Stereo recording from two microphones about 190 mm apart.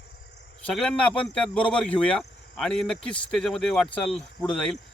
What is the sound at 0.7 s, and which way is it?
Speech, 5° left (ahead or behind).